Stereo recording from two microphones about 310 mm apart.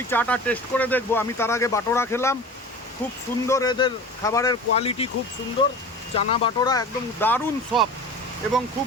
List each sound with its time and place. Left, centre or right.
0.1 s speech: centre
3.4 s speech: centre